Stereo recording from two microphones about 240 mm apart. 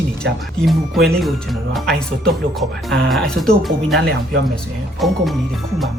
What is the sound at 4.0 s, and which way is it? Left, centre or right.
Speech, right.